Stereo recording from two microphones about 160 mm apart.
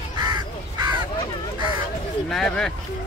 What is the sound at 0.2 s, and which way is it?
Crow, 25° right (ahead or behind).